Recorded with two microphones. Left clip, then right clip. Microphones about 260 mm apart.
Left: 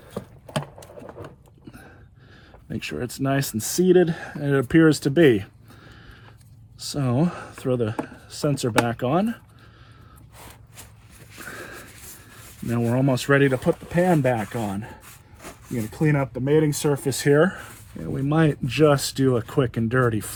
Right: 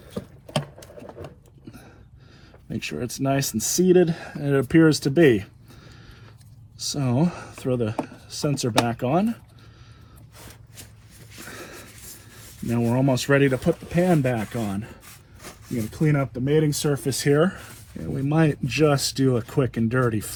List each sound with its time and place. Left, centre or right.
0.6 s patter: left
2.6 s speech: left
11.4 s a sound: left
12.6 s speech: left
15.7 s speech: left
17.3 s speech: left